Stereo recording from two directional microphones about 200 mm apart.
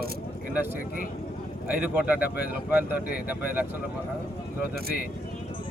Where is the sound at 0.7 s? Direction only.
45° left (ahead or behind).